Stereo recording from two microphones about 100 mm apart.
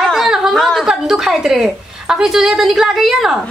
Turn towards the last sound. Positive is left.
turn(degrees=-5)  # may be behind; listen again after turning